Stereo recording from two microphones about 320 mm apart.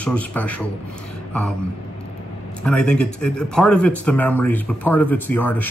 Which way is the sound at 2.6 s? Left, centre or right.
Centre.